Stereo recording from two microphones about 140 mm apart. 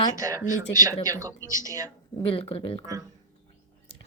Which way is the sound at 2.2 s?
40° left (ahead or behind).